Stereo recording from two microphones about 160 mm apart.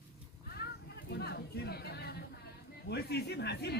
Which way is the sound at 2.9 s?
90° left.